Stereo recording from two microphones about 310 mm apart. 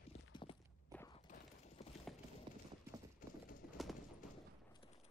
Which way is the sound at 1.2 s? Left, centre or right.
Left.